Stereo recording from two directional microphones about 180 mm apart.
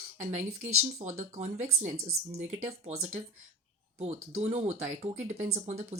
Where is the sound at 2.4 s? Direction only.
90° right.